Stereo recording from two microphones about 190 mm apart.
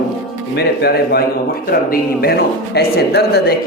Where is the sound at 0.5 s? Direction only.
55° left (ahead or behind).